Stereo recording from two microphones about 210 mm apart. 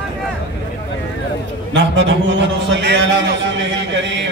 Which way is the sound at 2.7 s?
55° right (ahead or behind).